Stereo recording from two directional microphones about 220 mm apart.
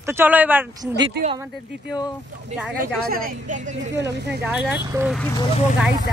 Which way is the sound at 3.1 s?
40° right (ahead or behind).